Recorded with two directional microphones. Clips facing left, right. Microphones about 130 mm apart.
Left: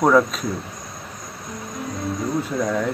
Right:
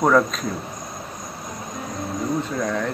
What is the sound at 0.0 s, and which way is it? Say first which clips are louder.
Speech: left 1 dB; 5° left (ahead or behind).